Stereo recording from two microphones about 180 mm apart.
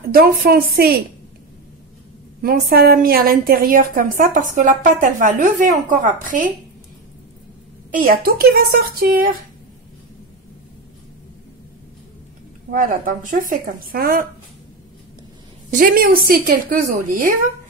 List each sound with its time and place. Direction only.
0.1 s speech: 55° right (ahead or behind)
2.4 s a woman's voice: 55° right (ahead or behind)
7.9 s speech: 55° right (ahead or behind)
12.7 s a woman's voice: 50° right (ahead or behind)
15.7 s a woman's voice: 50° right (ahead or behind)